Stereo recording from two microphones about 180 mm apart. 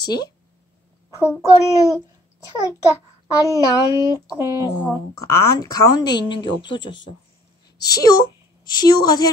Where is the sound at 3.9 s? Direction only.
20° right (ahead or behind).